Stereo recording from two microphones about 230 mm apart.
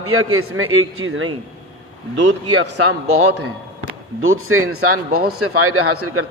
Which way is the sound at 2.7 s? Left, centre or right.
Right.